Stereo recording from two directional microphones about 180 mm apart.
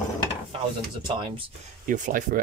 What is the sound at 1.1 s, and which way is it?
Speech, 30° right (ahead or behind).